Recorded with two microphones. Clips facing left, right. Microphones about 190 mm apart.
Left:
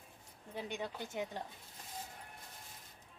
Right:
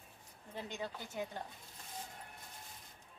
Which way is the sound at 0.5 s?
15° left (ahead or behind).